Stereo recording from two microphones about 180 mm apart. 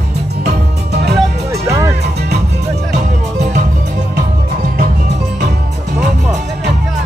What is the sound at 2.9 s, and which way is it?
Music, 40° right (ahead or behind).